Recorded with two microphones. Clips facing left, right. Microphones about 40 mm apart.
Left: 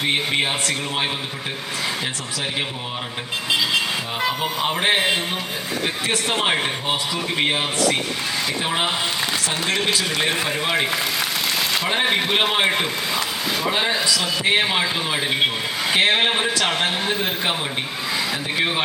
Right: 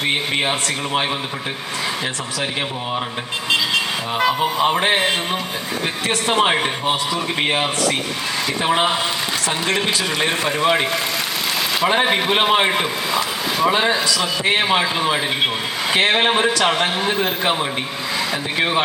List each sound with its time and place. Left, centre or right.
4.2 s a man's voice: centre
6.2 s a man's voice: centre
11.7 s a sound: centre
11.9 s a man's voice: centre